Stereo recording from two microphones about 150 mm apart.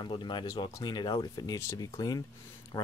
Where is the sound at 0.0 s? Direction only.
30° left (ahead or behind).